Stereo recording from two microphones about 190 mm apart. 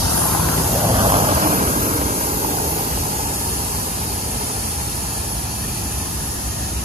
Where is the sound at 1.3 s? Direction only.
45° right (ahead or behind).